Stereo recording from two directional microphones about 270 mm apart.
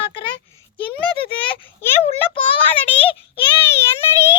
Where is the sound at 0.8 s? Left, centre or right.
Centre.